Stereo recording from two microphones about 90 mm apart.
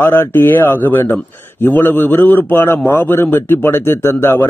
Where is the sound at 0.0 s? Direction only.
25° left (ahead or behind).